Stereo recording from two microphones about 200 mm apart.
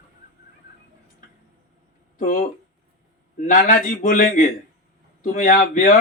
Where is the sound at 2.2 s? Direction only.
45° left (ahead or behind).